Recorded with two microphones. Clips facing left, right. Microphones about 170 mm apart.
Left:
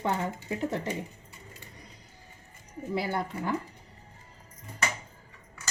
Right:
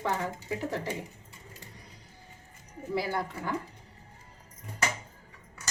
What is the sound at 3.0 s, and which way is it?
Speech, 20° left (ahead or behind).